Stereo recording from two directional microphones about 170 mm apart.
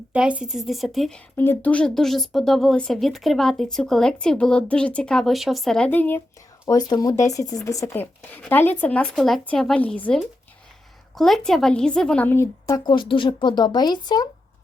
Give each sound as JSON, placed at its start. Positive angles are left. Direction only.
{"t": 0.1, "sound": "speech", "side_deg": -5}
{"t": 6.7, "sound": "a woman's voice", "side_deg": 25}
{"t": 8.0, "sound": "a woman's voice", "side_deg": 10}